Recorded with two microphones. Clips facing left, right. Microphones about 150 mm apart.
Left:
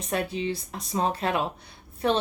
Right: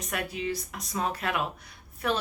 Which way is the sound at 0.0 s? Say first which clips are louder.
Left 4 dB; 25° left (ahead or behind).